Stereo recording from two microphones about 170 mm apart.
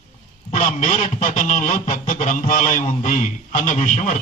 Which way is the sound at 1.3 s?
50° left (ahead or behind).